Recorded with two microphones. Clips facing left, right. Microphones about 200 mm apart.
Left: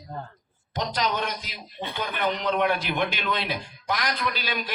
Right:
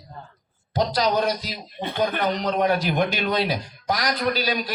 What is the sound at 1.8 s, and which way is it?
Speech, 50° right (ahead or behind).